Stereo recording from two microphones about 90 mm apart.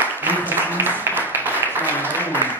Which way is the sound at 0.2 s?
20° right (ahead or behind).